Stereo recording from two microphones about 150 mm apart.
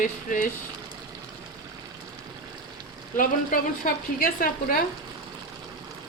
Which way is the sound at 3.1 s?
65° left (ahead or behind).